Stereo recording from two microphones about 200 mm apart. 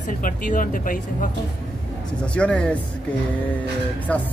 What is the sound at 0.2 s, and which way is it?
Speech, 40° left (ahead or behind).